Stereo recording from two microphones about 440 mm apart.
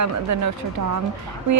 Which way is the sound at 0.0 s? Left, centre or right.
Right.